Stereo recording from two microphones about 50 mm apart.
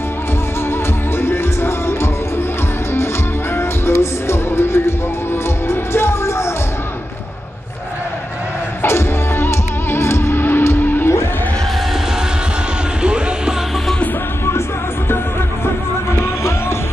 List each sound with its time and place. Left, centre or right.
0.7 s music: left
3.5 s music: left
8.8 s music: left
13.0 s music: centre
16.1 s music: left